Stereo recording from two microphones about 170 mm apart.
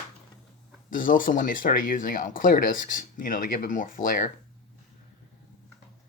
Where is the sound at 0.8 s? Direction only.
55° left (ahead or behind).